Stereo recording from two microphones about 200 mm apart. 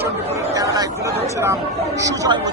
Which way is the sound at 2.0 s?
15° right (ahead or behind).